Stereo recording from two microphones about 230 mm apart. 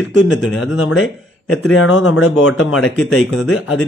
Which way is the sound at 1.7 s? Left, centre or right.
Left.